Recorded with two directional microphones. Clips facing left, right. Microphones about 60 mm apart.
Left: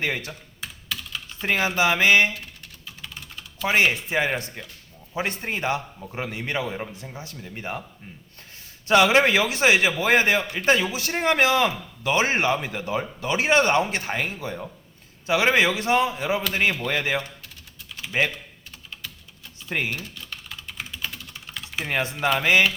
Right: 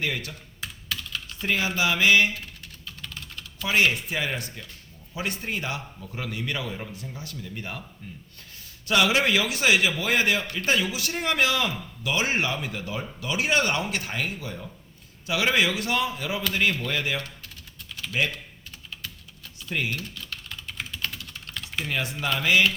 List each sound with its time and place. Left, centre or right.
0.0 s a man's voice: left
0.6 s computer keyboard: centre
1.5 s a man's voice: left
2.8 s typing: centre
3.7 s a man's voice: left
8.9 s a man's voice: left
17.4 s typing: centre
19.7 s a man's voice: left
20.0 s typing: centre
21.8 s a man's voice: left